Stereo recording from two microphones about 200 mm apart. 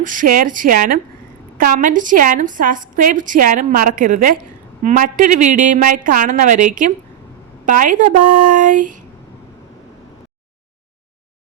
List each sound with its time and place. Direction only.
0.0 s a woman's voice: 40° right (ahead or behind)